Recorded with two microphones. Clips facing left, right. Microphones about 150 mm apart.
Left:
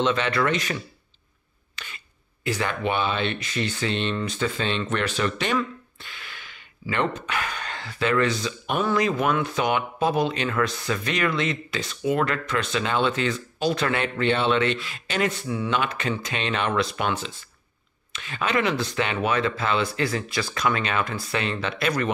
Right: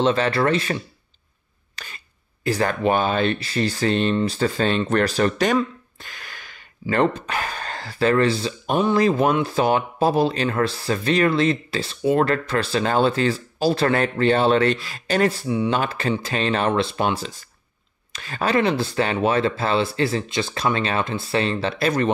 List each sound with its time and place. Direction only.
0.0 s speech: 35° right (ahead or behind)
1.8 s filing: 40° right (ahead or behind)
2.4 s speech: 40° right (ahead or behind)